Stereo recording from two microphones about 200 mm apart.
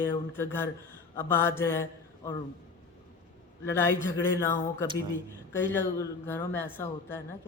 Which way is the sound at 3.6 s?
10° left (ahead or behind).